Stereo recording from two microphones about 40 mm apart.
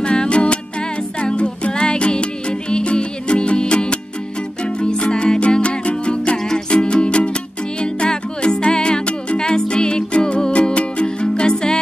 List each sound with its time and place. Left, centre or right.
0.0 s music: left